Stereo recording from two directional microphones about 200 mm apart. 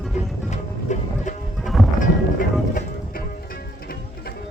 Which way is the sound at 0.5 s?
40° left (ahead or behind).